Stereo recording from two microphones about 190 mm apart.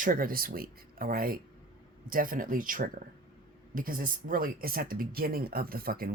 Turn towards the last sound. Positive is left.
turn(degrees=-50)  # may be behind; listen again after turning